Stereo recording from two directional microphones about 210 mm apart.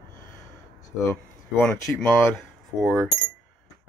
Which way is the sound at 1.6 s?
5° left (ahead or behind).